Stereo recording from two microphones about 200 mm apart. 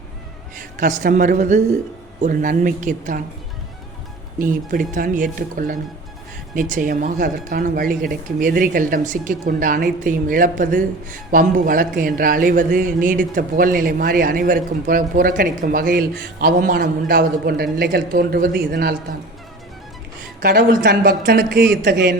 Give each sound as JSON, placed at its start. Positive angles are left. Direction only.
{"t": 0.6, "sound": "speech", "side_deg": -40}
{"t": 4.4, "sound": "speech", "side_deg": -45}
{"t": 20.4, "sound": "speech", "side_deg": -50}